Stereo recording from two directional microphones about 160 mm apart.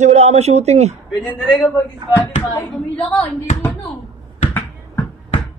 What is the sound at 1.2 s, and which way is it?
A man's voice, 5° left (ahead or behind).